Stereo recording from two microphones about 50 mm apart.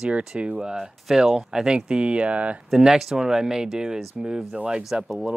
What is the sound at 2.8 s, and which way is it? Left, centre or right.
Speech, centre.